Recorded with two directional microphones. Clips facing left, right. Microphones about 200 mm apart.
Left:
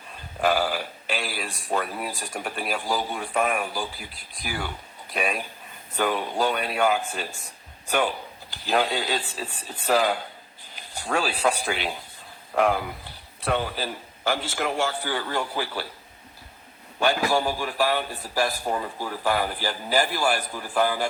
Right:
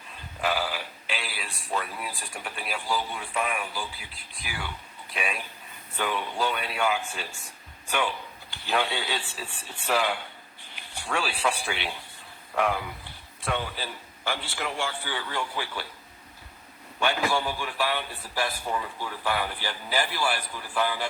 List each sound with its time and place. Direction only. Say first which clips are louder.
0.4 s a man's voice: left 5 dB; 45° left (ahead or behind)
17.0 s a man's voice: left 4 dB; 40° left (ahead or behind)